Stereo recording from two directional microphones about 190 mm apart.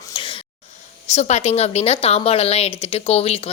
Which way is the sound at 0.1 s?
25° left (ahead or behind).